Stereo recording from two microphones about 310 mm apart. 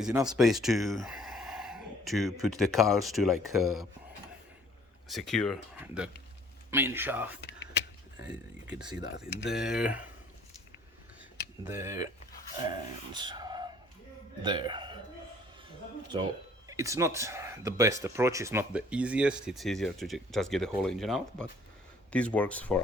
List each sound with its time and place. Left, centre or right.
0.0 s speech: centre
5.0 s speech: centre
9.0 s speech: left
9.5 s speech: centre
11.6 s speech: centre
13.1 s a sound: centre
14.4 s speech: centre
16.6 s speech: centre